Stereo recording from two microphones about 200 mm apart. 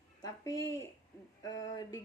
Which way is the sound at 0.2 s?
15° left (ahead or behind).